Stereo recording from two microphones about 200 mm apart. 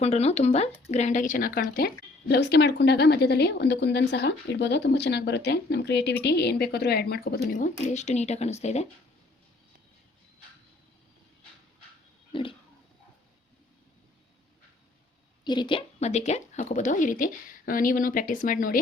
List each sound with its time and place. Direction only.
0.0 s a woman's voice: 30° left (ahead or behind)
12.3 s a sound: 25° left (ahead or behind)
15.4 s a woman's voice: 25° left (ahead or behind); by 18.8 s 45° left (ahead or behind)